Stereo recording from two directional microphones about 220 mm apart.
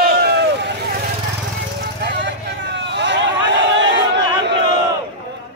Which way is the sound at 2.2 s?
55° right (ahead or behind).